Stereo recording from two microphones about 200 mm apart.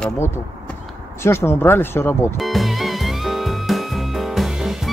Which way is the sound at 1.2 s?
15° left (ahead or behind).